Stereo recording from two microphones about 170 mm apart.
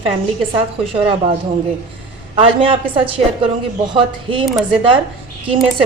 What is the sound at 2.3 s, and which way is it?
Speech, 30° right (ahead or behind).